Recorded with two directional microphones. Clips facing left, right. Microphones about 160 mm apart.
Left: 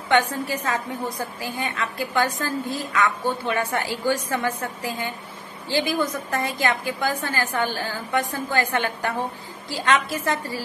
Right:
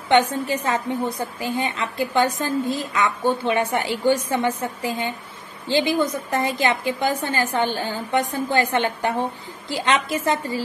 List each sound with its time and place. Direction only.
0.1 s a woman's voice: 20° right (ahead or behind)